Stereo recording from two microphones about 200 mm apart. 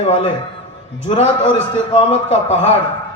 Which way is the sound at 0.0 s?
30° left (ahead or behind).